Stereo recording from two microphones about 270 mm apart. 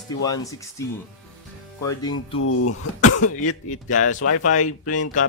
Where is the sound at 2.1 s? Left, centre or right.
Left.